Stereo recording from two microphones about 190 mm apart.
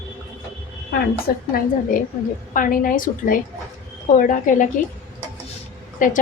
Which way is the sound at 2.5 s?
45° left (ahead or behind).